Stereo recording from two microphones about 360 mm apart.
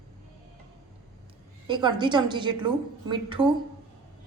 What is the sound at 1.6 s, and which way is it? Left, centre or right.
A woman's voice, centre.